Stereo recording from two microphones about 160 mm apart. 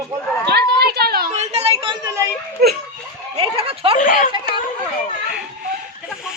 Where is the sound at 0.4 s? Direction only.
85° right.